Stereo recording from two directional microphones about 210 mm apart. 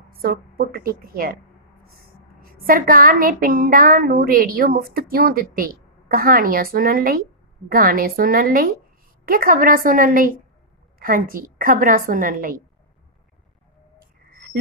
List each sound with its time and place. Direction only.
0.2 s a woman's voice: 45° right (ahead or behind)